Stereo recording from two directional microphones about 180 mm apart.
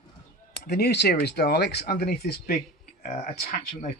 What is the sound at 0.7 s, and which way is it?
Speech, 65° left (ahead or behind).